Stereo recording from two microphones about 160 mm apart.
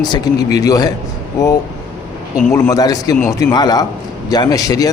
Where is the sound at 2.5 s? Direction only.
20° left (ahead or behind).